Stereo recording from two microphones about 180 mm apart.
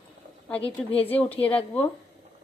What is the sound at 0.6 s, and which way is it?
Speech, 30° left (ahead or behind).